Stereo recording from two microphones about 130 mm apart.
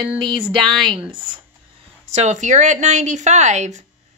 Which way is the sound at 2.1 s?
65° right (ahead or behind).